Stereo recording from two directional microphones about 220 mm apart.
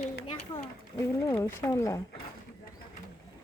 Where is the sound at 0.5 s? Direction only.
15° left (ahead or behind).